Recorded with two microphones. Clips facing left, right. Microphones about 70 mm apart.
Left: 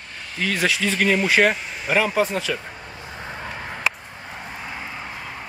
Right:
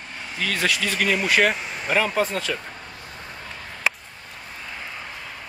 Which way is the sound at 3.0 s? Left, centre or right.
Left.